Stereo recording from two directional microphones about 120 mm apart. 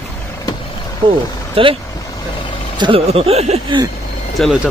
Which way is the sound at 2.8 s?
50° right (ahead or behind).